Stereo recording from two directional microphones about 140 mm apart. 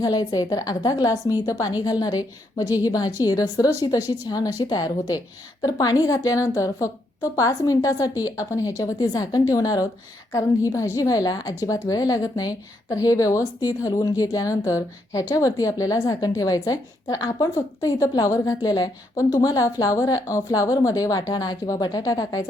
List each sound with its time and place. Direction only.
0.0 s a woman's voice: 30° left (ahead or behind)